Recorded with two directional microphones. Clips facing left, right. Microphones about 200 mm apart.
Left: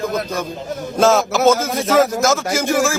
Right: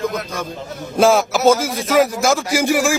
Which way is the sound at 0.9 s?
10° right (ahead or behind).